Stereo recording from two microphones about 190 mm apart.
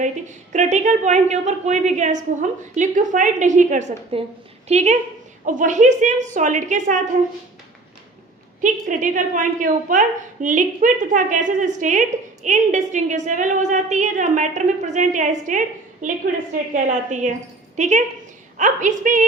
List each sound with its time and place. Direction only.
0.0 s a woman's voice: 40° right (ahead or behind)
8.6 s a woman's voice: 40° right (ahead or behind)